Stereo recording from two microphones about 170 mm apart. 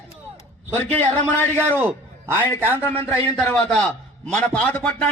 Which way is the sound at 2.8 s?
15° left (ahead or behind).